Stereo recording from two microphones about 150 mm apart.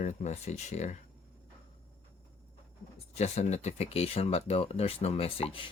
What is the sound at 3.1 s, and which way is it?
Speech, 50° left (ahead or behind).